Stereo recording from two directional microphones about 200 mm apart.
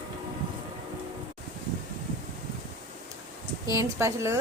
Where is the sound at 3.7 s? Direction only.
15° right (ahead or behind).